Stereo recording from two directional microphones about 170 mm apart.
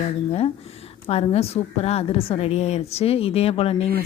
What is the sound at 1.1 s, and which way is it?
A woman's voice, 35° left (ahead or behind).